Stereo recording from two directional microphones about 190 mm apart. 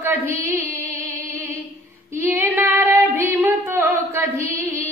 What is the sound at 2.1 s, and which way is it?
Female singing, 15° right (ahead or behind).